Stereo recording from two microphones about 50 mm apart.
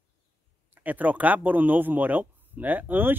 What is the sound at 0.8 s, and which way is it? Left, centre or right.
Speech, right.